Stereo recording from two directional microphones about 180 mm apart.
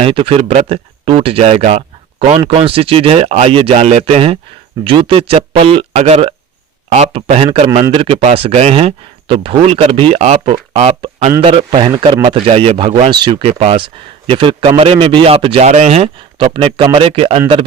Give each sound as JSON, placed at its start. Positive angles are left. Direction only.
{"t": 0.0, "sound": "speech", "side_deg": -30}
{"t": 2.4, "sound": "speech", "side_deg": -20}
{"t": 2.7, "sound": "speech", "side_deg": -30}